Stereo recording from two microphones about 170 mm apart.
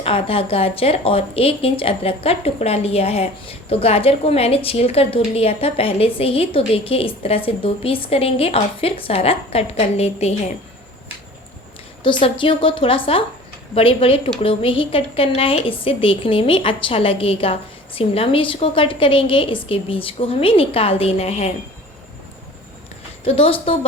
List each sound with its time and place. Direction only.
0.0 s speech: 35° left (ahead or behind)
12.0 s speech: 30° left (ahead or behind)
23.2 s speech: 35° left (ahead or behind)